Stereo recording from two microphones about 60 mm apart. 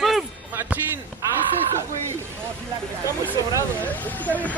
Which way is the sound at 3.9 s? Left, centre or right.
Left.